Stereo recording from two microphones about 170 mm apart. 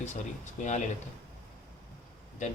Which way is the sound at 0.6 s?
45° left (ahead or behind).